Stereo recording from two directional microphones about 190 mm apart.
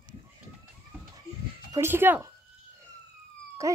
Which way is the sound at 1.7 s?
15° right (ahead or behind).